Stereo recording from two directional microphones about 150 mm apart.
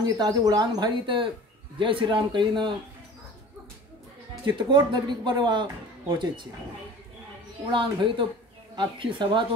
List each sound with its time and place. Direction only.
0.0 s a man's voice: 25° right (ahead or behind)
4.5 s a man's voice: 30° right (ahead or behind)
7.7 s a man's voice: 30° right (ahead or behind)